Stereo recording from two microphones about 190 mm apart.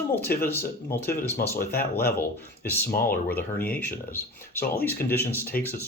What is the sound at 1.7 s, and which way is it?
Speech, 55° left (ahead or behind).